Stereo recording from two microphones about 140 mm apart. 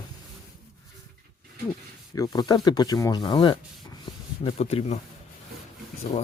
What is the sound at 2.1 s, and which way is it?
Speech, 25° left (ahead or behind).